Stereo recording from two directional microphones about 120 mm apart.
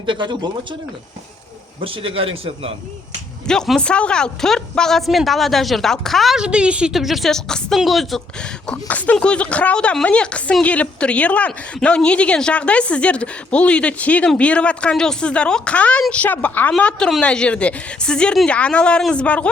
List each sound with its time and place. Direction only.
0.0 s speech: 40° right (ahead or behind)
1.8 s a man's voice: 50° right (ahead or behind)
3.4 s speech: 5° left (ahead or behind)